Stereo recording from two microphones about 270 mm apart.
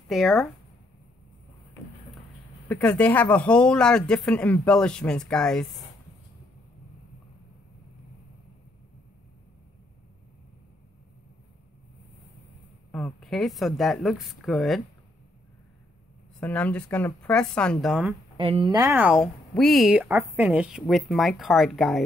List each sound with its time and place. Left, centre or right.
0.1 s speech: centre
2.7 s speech: centre
12.9 s speech: centre
16.3 s speech: centre
18.4 s speech: centre